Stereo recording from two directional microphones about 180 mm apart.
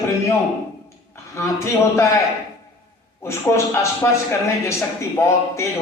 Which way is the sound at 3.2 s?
15° left (ahead or behind).